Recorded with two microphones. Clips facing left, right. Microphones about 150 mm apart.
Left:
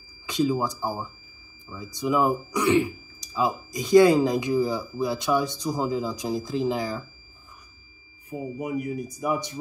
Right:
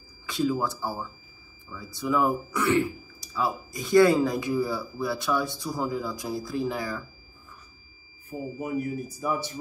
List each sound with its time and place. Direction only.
0.3 s speech: 20° left (ahead or behind)
8.3 s speech: 15° left (ahead or behind)